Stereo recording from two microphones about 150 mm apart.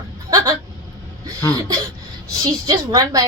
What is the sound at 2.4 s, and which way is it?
Speech, 25° right (ahead or behind).